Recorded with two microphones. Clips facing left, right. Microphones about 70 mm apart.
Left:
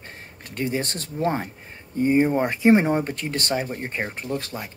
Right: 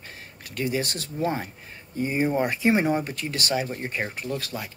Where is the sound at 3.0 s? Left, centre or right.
Left.